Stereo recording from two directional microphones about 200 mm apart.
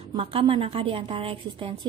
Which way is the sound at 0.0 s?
25° right (ahead or behind).